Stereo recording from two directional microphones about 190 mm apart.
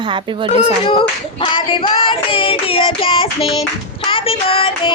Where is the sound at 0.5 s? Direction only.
30° left (ahead or behind).